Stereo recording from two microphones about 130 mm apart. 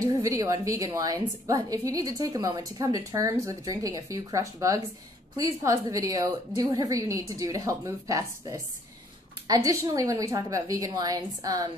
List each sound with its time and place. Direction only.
0.0 s speech: 25° right (ahead or behind)